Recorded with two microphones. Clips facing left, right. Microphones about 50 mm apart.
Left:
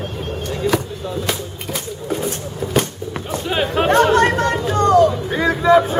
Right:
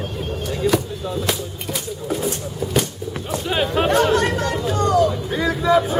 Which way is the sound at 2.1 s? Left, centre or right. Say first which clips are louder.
Left 1 dB; centre.